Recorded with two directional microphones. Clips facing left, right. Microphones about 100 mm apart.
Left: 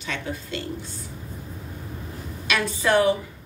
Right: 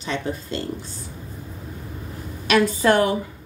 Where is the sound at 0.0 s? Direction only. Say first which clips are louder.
Right 4 dB; 30° right (ahead or behind).